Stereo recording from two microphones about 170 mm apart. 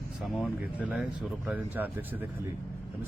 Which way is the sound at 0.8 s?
5° right (ahead or behind).